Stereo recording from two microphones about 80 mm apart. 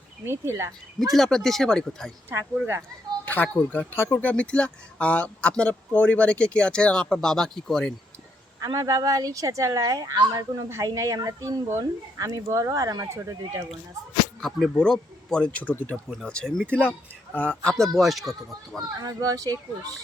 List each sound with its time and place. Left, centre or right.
0.3 s speech: right
1.1 s speech: centre
3.2 s speech: left
8.6 s speech: right
10.7 s speech: right
14.4 s speech: centre
15.6 s speech: left
16.0 s speech: centre
18.9 s speech: right